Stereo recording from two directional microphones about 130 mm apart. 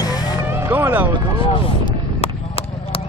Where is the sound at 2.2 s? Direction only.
50° left (ahead or behind).